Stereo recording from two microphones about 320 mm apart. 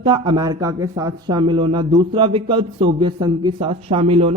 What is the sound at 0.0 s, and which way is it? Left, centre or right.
Speech, centre.